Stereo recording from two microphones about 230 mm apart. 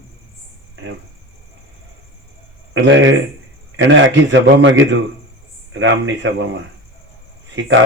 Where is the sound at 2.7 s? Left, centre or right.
Right.